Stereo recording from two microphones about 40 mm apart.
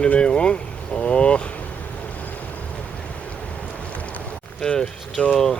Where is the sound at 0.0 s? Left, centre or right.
Left.